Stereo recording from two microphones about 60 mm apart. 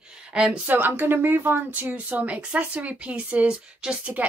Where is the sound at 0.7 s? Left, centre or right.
Right.